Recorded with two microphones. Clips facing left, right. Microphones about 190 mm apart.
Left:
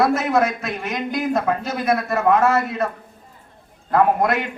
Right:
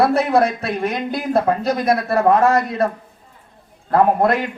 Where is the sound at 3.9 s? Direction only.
35° right (ahead or behind).